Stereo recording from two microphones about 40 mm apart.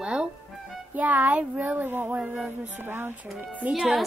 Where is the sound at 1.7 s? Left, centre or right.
Right.